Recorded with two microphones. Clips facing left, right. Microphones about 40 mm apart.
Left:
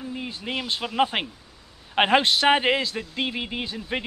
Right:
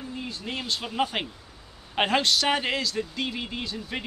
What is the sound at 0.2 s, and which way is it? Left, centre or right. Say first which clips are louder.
Speech: left 2 dB; left.